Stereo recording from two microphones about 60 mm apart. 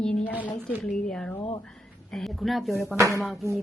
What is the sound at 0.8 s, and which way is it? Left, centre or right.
Speech, centre.